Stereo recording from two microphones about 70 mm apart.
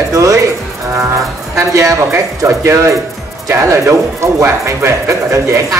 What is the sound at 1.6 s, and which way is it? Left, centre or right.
Speech, right.